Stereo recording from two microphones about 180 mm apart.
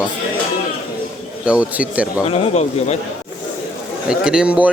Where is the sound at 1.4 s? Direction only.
5° right (ahead or behind).